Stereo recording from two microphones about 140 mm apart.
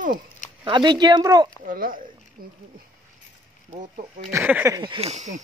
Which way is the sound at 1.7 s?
85° right.